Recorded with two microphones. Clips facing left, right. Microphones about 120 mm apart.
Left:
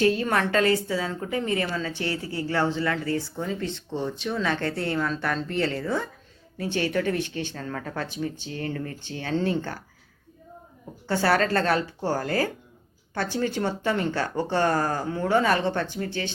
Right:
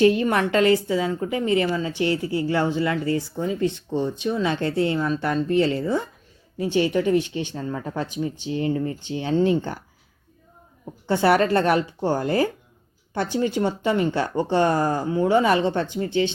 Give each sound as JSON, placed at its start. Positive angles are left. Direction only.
{"t": 0.0, "sound": "speech", "side_deg": -20}
{"t": 11.0, "sound": "speech", "side_deg": -20}